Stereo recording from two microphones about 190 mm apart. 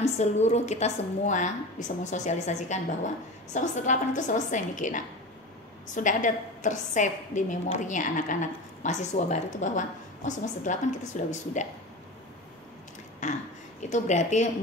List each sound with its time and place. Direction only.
0.0 s a woman's voice: 35° left (ahead or behind)
13.2 s a woman's voice: 40° left (ahead or behind)